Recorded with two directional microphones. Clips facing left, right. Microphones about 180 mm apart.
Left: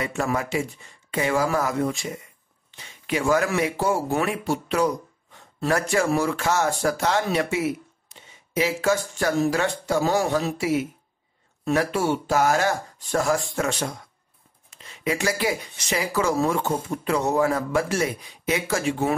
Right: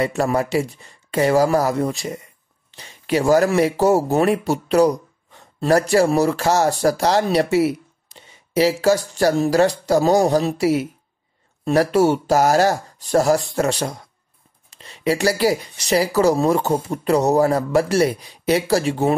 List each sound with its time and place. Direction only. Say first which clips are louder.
0.0 s speech: right 6 dB; 35° right (ahead or behind)